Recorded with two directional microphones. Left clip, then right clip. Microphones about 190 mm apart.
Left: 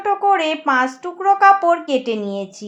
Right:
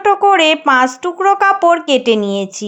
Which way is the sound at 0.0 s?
50° right (ahead or behind).